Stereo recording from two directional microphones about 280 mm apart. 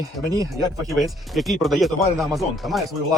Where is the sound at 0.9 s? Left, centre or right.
Centre.